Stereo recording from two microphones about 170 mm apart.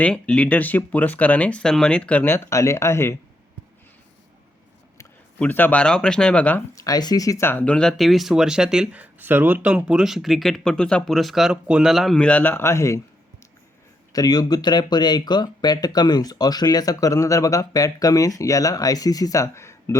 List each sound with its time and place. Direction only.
0.0 s speech: 5° left (ahead or behind)
4.9 s speech: 10° left (ahead or behind)
6.7 s speech: 20° left (ahead or behind)
14.1 s speech: 20° left (ahead or behind)